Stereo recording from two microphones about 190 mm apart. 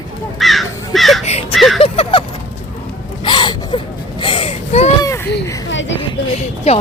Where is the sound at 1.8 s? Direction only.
30° left (ahead or behind).